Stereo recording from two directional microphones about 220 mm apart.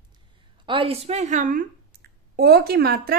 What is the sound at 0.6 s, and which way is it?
A woman's voice, 25° right (ahead or behind).